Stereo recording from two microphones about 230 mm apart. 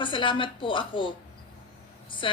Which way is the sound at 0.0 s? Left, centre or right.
Left.